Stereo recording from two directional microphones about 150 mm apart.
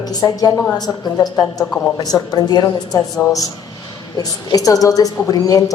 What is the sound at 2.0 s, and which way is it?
A woman's voice, 25° left (ahead or behind).